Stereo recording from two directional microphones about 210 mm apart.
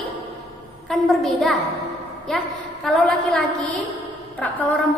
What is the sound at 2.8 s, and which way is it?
Speech, centre (ahead or behind).